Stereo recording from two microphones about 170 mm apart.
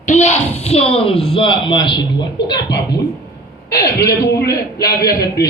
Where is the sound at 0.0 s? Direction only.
45° left (ahead or behind); by 3.0 s 25° left (ahead or behind).